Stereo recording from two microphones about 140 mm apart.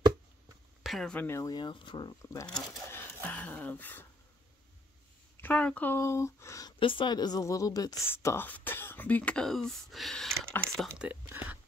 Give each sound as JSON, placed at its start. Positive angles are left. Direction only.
{"t": 0.8, "sound": "speech", "side_deg": 5}
{"t": 1.2, "sound": "a woman's voice", "side_deg": 20}
{"t": 2.9, "sound": "a sound", "side_deg": 15}
{"t": 5.4, "sound": "speech", "side_deg": 10}
{"t": 6.8, "sound": "a woman's voice", "side_deg": 35}
{"t": 11.0, "sound": "speech", "side_deg": -10}